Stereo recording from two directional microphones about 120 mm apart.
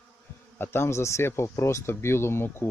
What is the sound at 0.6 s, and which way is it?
Speech, 20° left (ahead or behind).